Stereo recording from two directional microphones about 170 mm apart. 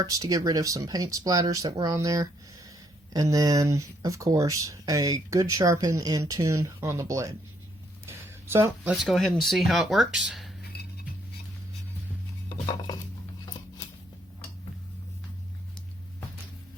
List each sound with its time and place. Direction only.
0.0 s speech: 20° right (ahead or behind)
8.0 s a sound: 15° right (ahead or behind)
8.9 s speech: centre (ahead or behind)